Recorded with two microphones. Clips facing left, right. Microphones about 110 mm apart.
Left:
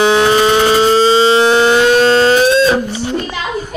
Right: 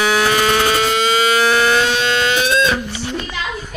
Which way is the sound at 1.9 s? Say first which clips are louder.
Left 9 dB; 40° left (ahead or behind).